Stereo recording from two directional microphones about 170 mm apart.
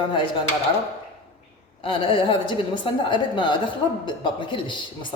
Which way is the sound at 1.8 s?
30° left (ahead or behind).